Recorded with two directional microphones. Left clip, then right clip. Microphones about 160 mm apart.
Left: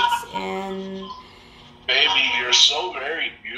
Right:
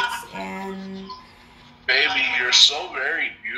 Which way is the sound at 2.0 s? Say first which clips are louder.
Left 4 dB; 30° right (ahead or behind).